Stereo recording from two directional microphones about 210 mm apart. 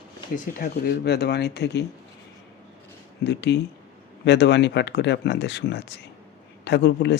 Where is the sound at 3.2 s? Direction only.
55° left (ahead or behind).